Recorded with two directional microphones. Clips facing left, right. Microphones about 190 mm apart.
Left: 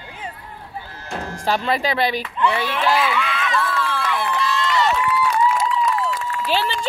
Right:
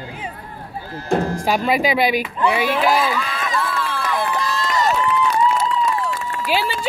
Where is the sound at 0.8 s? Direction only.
40° right (ahead or behind).